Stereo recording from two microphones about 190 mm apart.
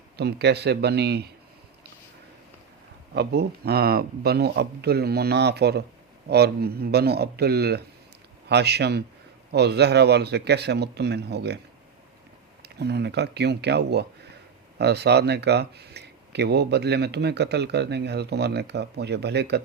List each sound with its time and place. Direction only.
0.2 s speech: 60° right (ahead or behind)
3.2 s speech: 60° right (ahead or behind)
12.6 s speech: 60° right (ahead or behind)